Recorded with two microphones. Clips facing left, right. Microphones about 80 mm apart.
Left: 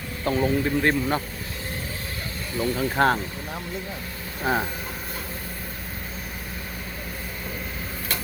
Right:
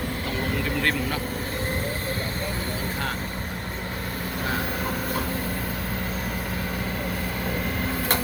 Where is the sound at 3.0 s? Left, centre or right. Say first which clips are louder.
Left 13 dB; left.